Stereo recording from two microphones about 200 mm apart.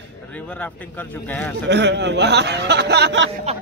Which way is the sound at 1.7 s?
60° right (ahead or behind).